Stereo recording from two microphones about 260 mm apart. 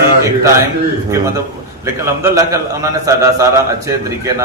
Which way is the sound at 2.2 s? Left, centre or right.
Centre.